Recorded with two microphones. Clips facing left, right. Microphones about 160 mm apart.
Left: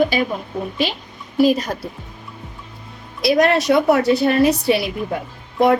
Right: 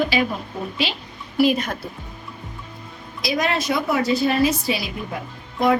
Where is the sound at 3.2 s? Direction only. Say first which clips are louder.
Left 8 dB; 65° left (ahead or behind).